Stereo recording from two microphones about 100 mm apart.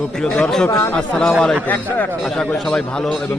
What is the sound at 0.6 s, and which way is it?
Speech, 30° left (ahead or behind).